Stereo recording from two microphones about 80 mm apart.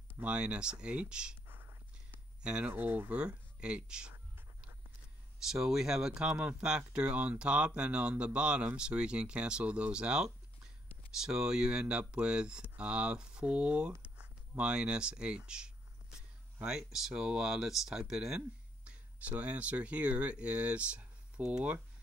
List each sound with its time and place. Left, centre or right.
0.2 s speech: centre
1.5 s whispering: right
2.4 s speech: centre
2.7 s speech: right
3.2 s speech: centre
4.1 s a sound: right
5.5 s speech: centre
18.9 s speech: centre